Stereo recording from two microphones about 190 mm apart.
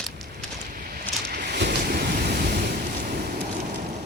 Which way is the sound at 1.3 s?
60° right (ahead or behind).